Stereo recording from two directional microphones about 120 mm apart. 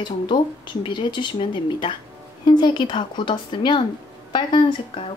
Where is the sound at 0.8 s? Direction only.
40° left (ahead or behind).